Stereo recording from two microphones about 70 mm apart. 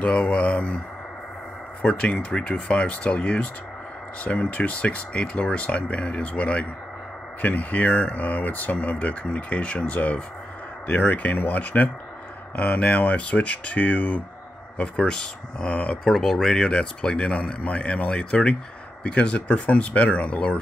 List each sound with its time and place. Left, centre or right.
0.0 s a sound: centre
1.8 s a man's voice: centre
16.0 s a man's voice: centre